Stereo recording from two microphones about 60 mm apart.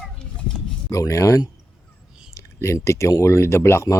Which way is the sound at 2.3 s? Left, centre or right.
Left.